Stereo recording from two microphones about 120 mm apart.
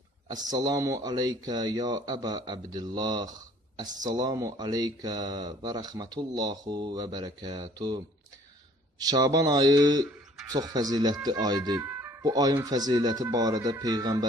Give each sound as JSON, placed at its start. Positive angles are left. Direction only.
{"t": 0.3, "sound": "speech", "side_deg": -35}
{"t": 11.8, "sound": "music", "side_deg": -20}
{"t": 12.6, "sound": "speech", "side_deg": -35}